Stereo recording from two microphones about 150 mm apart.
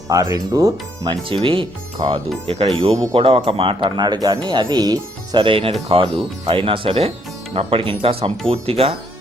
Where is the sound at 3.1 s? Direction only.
35° right (ahead or behind).